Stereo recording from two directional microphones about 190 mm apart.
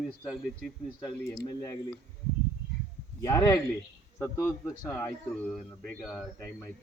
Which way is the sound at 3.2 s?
20° left (ahead or behind).